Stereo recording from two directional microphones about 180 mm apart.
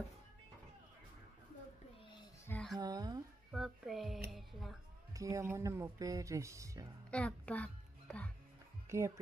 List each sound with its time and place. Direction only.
2.4 s a sound: 5° left (ahead or behind)
2.8 s a sound: 20° right (ahead or behind)
3.5 s child singing: centre (ahead or behind)
4.3 s music: centre (ahead or behind)
5.1 s speech: 15° right (ahead or behind)
7.1 s music: 5° left (ahead or behind)
8.8 s speech: 15° right (ahead or behind)